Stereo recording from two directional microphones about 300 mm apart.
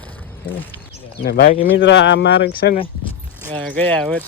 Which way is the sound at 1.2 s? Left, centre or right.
Left.